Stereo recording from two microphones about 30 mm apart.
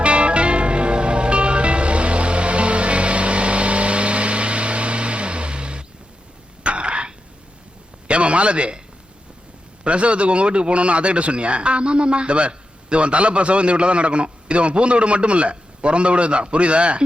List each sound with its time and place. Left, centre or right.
0.0 s music: right
6.6 s throat clearing: right
8.0 s a sound: right
9.8 s a man's voice: right